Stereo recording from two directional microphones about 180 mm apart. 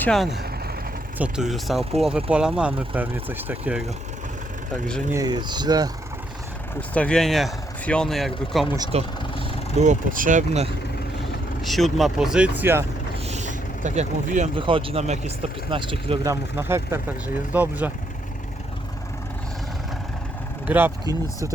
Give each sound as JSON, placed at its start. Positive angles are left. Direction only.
{"t": 0.0, "sound": "speech", "side_deg": 5}
{"t": 5.1, "sound": "speech", "side_deg": -20}
{"t": 6.9, "sound": "speech", "side_deg": 5}
{"t": 8.9, "sound": "speech", "side_deg": -35}
{"t": 11.6, "sound": "speech", "side_deg": 0}
{"t": 13.2, "sound": "vehicle", "side_deg": -40}
{"t": 14.6, "sound": "speech", "side_deg": -30}
{"t": 20.7, "sound": "speech", "side_deg": -10}